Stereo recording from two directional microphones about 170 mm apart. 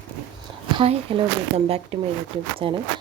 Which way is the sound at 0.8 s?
35° right (ahead or behind).